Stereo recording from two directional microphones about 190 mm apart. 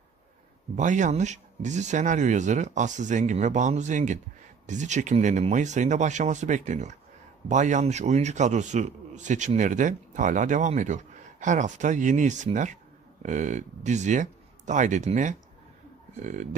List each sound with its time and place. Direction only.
0.7 s a man's voice: 40° right (ahead or behind)